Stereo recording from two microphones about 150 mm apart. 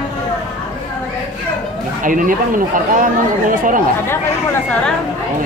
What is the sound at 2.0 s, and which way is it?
Speech, 65° right (ahead or behind).